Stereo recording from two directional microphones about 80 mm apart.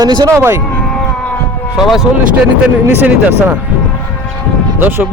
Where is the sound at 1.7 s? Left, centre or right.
Centre.